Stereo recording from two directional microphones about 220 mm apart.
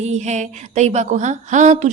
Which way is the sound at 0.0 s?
30° right (ahead or behind).